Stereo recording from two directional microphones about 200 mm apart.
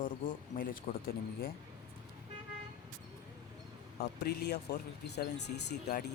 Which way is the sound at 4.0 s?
55° left (ahead or behind).